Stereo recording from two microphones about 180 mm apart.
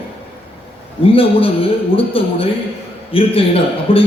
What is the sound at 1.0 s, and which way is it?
A man's voice, 30° left (ahead or behind).